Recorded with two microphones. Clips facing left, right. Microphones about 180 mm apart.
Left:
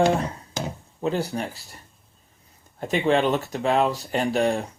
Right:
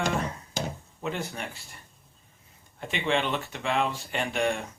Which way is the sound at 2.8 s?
40° left (ahead or behind).